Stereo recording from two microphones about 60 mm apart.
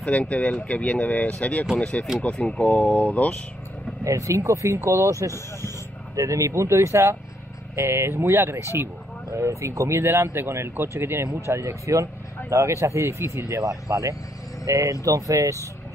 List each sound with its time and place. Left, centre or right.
0.0 s speech: left
4.0 s speech: right
6.1 s speech: right
9.4 s speech: right
11.4 s speech: right